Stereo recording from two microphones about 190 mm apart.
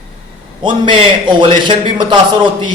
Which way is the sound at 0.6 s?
25° right (ahead or behind).